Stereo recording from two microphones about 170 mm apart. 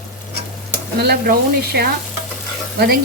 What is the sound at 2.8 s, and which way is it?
Speech, 75° right (ahead or behind).